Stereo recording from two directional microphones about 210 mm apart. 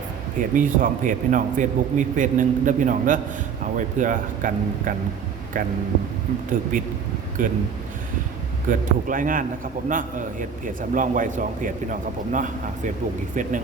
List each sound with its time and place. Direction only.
0.5 s a man's voice: 40° right (ahead or behind)
6.7 s a man's voice: 40° right (ahead or behind)
8.7 s a man's voice: 40° right (ahead or behind)
10.8 s a man's voice: 40° right (ahead or behind)